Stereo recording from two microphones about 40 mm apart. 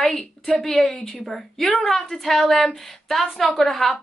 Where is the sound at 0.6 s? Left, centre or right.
Centre.